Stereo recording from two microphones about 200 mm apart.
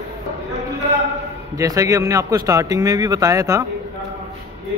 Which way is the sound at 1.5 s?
15° right (ahead or behind).